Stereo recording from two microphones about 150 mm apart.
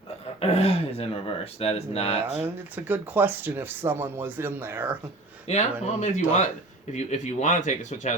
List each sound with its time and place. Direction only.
0.3 s speech: 40° left (ahead or behind)
2.4 s speech: 10° right (ahead or behind)
5.5 s speech: 50° left (ahead or behind)